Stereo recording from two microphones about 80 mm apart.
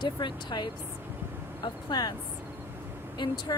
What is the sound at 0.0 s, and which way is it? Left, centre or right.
Speech, left.